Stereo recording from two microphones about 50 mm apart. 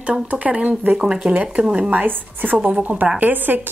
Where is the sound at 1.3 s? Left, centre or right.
Right.